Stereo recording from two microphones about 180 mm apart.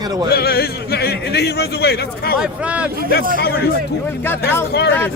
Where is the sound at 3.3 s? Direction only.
60° left (ahead or behind).